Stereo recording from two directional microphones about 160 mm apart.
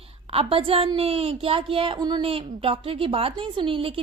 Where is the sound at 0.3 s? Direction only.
35° right (ahead or behind).